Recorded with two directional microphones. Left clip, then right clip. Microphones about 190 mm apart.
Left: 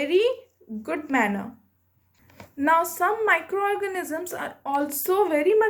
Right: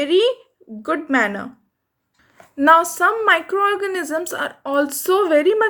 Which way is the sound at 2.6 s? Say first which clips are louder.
Right 8 dB; 25° right (ahead or behind).